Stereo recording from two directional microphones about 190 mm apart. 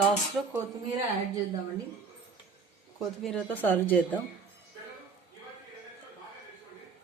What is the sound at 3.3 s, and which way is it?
Speech, 5° left (ahead or behind).